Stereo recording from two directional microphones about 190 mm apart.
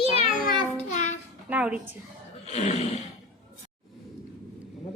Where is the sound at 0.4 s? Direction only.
40° left (ahead or behind).